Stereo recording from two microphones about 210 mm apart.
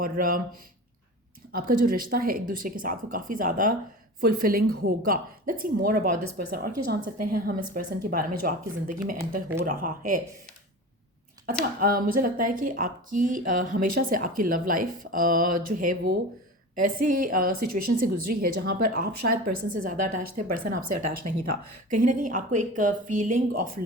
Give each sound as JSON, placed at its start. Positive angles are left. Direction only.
{"t": 0.0, "sound": "speech", "side_deg": -40}
{"t": 1.5, "sound": "speech", "side_deg": -45}
{"t": 11.8, "sound": "speech", "side_deg": -45}